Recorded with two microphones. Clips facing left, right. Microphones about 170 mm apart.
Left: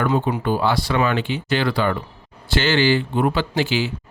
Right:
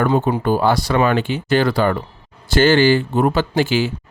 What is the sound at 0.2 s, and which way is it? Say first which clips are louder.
Speech: right 4 dB; 40° right (ahead or behind).